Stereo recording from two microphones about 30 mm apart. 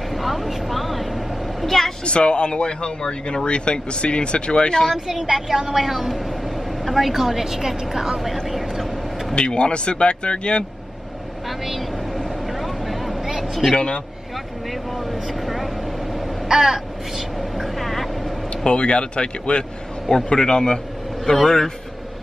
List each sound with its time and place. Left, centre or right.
0.1 s vehicle: centre
2.0 s speech: left
5.2 s a woman's voice: centre
8.5 s vehicle: centre
9.3 s speech: left
11.4 s vehicle: centre
13.7 s speech: left
14.7 s speech: centre
16.4 s caw: centre
17.4 s vehicle: centre
18.6 s speech: left
20.1 s speech: centre